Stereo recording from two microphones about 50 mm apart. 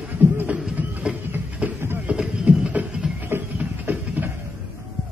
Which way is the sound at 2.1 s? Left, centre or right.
Centre.